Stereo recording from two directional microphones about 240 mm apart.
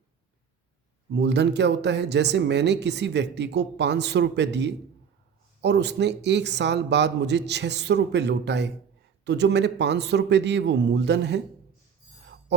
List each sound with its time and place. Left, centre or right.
1.1 s speech: right